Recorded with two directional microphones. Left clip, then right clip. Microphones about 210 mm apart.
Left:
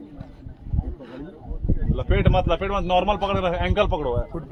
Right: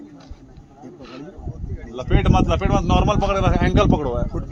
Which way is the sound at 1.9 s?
60° right (ahead or behind).